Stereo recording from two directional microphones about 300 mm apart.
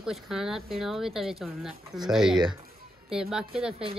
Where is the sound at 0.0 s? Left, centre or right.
Centre.